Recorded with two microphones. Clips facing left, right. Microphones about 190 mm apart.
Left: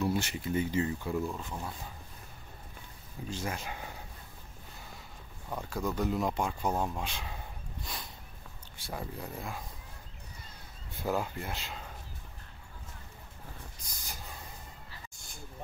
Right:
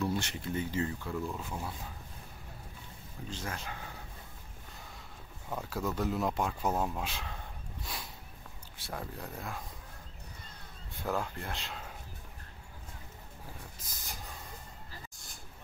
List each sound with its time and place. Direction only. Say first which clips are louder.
0.0 s speech: left 2 dB; 5° left (ahead or behind)
1.3 s speech: even; 5° right (ahead or behind)
3.3 s speech: left 3 dB; 10° left (ahead or behind)
5.5 s speech: left 1 dB; 5° right (ahead or behind)
7.8 s a sound: even; 5° right (ahead or behind)
8.7 s speech: left 2 dB; centre (ahead or behind)
11.1 s speech: left 2 dB; 10° left (ahead or behind)
13.8 s a sound: left 1 dB; centre (ahead or behind)